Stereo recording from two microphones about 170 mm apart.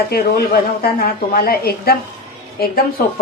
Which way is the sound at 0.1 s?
65° left (ahead or behind).